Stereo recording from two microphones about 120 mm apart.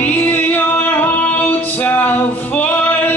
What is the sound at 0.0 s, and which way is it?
Music, 15° left (ahead or behind).